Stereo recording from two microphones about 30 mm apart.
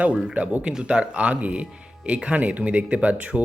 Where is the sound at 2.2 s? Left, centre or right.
Right.